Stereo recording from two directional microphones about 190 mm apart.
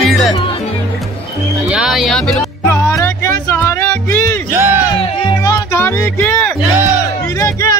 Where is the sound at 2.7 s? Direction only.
15° left (ahead or behind).